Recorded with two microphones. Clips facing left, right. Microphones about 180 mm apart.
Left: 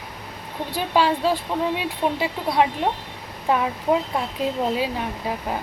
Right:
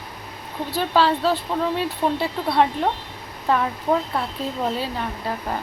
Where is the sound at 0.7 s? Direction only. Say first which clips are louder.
Right 1 dB; 15° left (ahead or behind).